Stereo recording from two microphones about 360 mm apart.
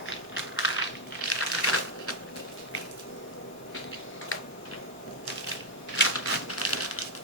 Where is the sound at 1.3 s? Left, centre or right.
Left.